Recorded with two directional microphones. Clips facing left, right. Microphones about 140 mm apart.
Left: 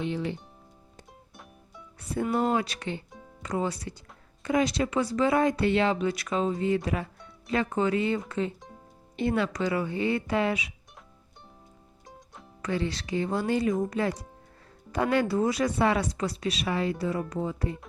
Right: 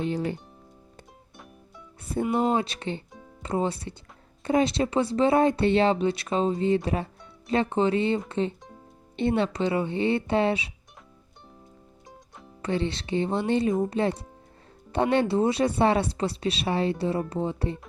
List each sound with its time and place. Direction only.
0.1 s speech: 40° right (ahead or behind)
2.5 s speech: 25° right (ahead or behind)
12.0 s music: centre (ahead or behind)
12.6 s speech: 25° right (ahead or behind)